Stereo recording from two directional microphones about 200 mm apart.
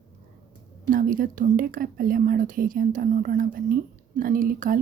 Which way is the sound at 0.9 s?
45° right (ahead or behind).